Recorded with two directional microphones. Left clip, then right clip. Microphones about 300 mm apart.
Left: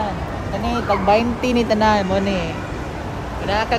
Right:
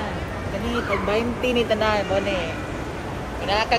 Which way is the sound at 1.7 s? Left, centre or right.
Left.